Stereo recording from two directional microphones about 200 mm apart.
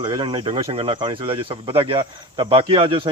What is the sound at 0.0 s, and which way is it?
Speech, 20° right (ahead or behind).